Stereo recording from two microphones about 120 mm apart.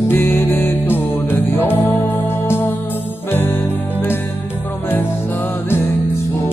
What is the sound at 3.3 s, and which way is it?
Music, 15° left (ahead or behind).